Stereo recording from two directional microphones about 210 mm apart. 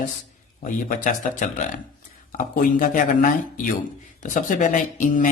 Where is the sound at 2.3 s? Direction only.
40° left (ahead or behind).